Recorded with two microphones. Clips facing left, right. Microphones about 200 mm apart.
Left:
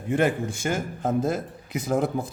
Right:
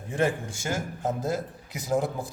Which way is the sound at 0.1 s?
60° left (ahead or behind).